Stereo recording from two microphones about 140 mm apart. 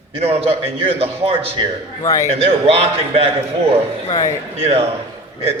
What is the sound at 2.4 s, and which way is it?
Speech, 45° right (ahead or behind).